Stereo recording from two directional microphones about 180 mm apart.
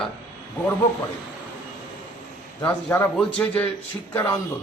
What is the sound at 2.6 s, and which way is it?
A man's voice, 10° left (ahead or behind).